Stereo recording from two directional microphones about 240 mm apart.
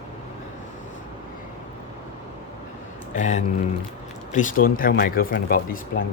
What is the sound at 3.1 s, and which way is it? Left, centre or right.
Speech, left.